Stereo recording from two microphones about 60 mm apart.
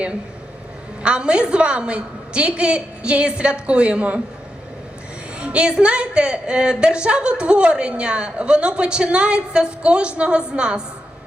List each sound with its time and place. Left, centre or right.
1.0 s speech: centre
5.4 s speech: centre